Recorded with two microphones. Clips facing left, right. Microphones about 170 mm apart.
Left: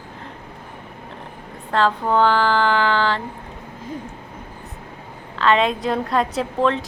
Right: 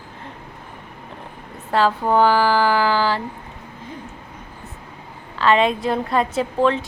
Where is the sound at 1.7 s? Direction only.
5° right (ahead or behind).